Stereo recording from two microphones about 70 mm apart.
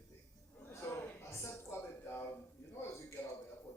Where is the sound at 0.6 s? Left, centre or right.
Left.